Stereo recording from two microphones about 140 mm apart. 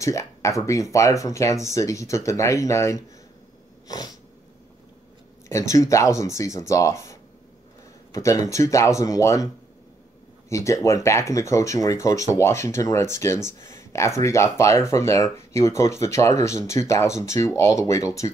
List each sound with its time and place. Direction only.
0.0 s speech: 20° left (ahead or behind)
3.8 s cat: 25° left (ahead or behind)
5.8 s speech: 20° left (ahead or behind)
10.5 s speech: 20° left (ahead or behind)